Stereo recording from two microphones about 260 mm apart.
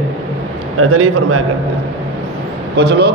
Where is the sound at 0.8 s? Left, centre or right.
Right.